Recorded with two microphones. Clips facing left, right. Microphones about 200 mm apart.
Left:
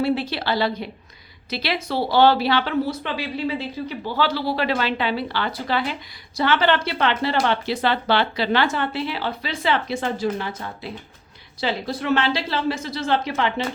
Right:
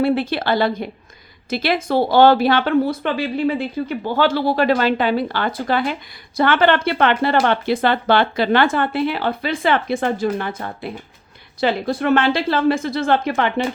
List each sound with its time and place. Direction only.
0.0 s speech: 55° right (ahead or behind)